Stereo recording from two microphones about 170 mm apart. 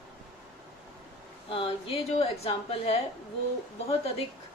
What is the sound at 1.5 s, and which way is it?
A woman's voice, 35° left (ahead or behind).